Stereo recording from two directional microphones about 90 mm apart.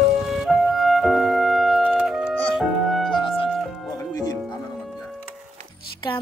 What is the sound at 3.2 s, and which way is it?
Music, 85° left.